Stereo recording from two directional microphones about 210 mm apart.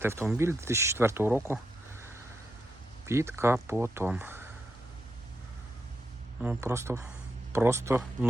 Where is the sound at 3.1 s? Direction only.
15° right (ahead or behind).